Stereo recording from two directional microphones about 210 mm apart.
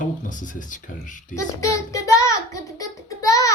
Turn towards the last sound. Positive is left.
turn(degrees=15)  # may be behind; listen again after turning